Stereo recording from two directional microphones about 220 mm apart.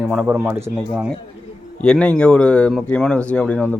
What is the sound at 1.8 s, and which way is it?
A man's voice, 5° left (ahead or behind).